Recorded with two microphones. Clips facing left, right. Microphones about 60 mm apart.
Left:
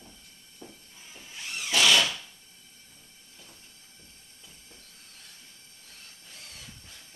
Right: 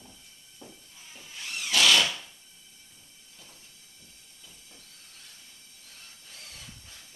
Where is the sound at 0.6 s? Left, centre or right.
Centre.